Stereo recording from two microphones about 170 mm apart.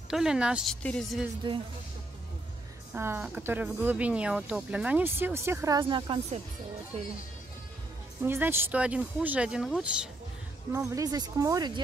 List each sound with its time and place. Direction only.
0.1 s a woman's voice: 5° right (ahead or behind)
2.9 s speech: 15° right (ahead or behind); by 6.2 s 30° right (ahead or behind)
8.2 s speech: 15° right (ahead or behind)
10.7 s speech: 20° right (ahead or behind)